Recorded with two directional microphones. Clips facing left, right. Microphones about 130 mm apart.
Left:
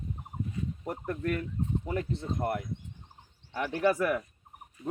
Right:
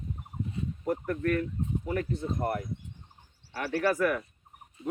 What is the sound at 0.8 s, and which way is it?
Speech, 25° left (ahead or behind).